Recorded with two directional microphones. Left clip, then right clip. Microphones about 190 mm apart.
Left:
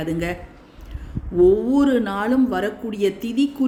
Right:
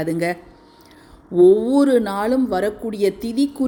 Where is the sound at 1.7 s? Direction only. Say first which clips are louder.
Right 3 dB; 25° right (ahead or behind).